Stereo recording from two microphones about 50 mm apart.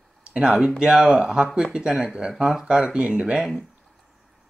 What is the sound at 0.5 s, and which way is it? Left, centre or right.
Speech, centre.